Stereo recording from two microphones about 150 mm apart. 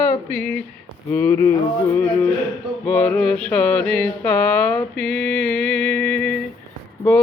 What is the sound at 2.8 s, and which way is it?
Music, 10° left (ahead or behind).